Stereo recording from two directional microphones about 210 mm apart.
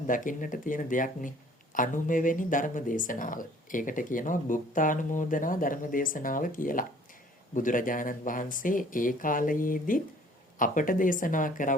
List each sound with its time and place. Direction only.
0.1 s speech: 40° left (ahead or behind)